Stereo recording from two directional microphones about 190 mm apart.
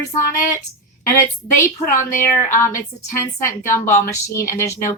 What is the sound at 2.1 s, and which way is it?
Speech, 45° left (ahead or behind).